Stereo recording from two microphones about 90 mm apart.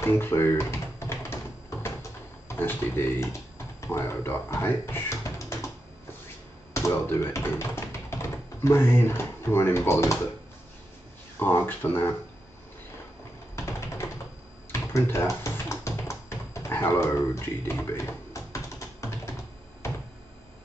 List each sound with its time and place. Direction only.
0.0 s typing: 25° left (ahead or behind)
2.4 s speech: 25° left (ahead or behind)
6.7 s speech: 30° left (ahead or behind)
11.3 s speech: 25° left (ahead or behind)
13.6 s typing: 30° left (ahead or behind)
14.7 s a sound: 30° left (ahead or behind)